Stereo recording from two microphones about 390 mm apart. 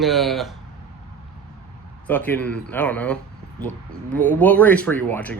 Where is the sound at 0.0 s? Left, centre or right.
Centre.